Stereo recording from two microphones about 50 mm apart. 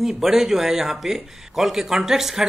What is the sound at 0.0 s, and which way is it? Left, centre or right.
Speech, centre.